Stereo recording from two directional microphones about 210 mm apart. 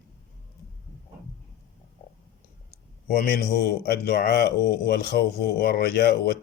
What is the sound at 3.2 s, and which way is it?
Speech, 50° left (ahead or behind).